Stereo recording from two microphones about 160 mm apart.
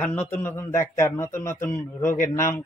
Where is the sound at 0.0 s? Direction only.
10° left (ahead or behind).